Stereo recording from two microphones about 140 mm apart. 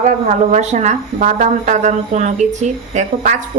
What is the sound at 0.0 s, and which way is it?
Speech, 60° right (ahead or behind).